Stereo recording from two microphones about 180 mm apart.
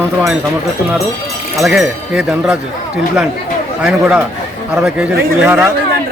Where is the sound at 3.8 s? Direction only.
5° right (ahead or behind).